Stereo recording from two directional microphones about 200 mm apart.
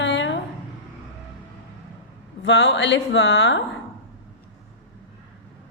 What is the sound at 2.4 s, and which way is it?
A woman's voice, 65° left (ahead or behind).